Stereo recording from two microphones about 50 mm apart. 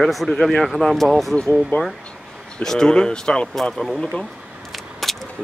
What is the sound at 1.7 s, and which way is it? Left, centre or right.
Speech, left.